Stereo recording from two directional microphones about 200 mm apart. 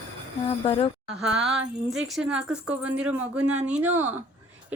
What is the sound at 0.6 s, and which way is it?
Speech, 25° left (ahead or behind).